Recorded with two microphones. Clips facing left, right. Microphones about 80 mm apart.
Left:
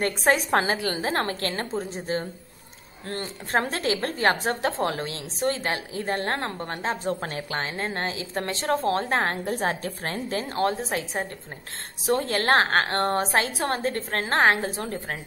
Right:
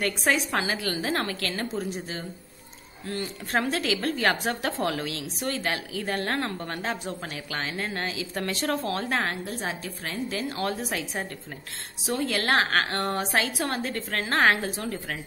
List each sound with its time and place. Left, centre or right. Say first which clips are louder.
0.0 s a woman's voice: left 3 dB; left
0.7 s a woman's voice: left 2 dB; left
1.0 s a woman's voice: left 2 dB; left